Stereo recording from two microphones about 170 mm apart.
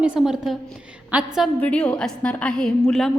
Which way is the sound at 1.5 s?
5° left (ahead or behind).